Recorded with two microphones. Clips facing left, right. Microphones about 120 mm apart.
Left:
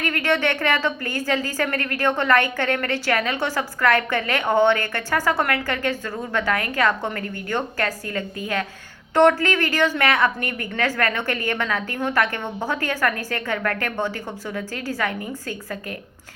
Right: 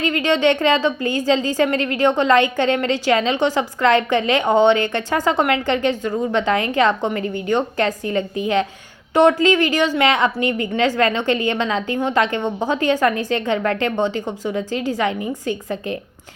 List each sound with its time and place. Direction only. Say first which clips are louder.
0.0 s a woman's voice: right 5 dB; 15° right (ahead or behind)